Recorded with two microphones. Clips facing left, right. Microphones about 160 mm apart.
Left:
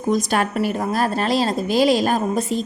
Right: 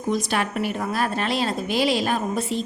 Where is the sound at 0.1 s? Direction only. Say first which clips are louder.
Left 4 dB; 45° left (ahead or behind).